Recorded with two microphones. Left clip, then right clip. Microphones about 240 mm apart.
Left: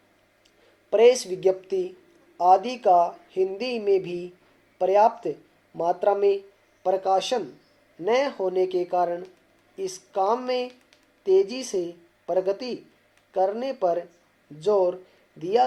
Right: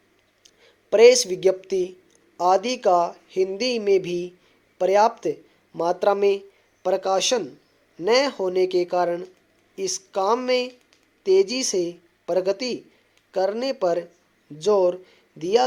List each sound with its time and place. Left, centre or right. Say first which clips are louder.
0.4 s speech: right 5 dB; right